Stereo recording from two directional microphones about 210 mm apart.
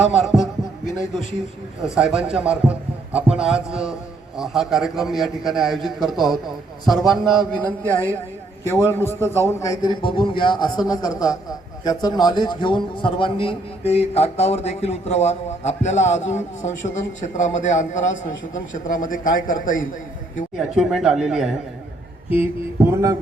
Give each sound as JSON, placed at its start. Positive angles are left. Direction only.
{"t": 2.0, "sound": "a man's voice", "side_deg": -5}
{"t": 20.6, "sound": "a man's voice", "side_deg": -5}